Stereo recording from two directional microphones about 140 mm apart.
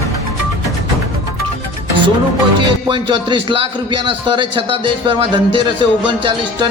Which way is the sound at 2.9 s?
35° right (ahead or behind).